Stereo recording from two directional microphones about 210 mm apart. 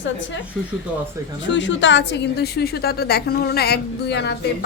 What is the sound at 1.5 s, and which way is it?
A woman's voice, 60° left (ahead or behind).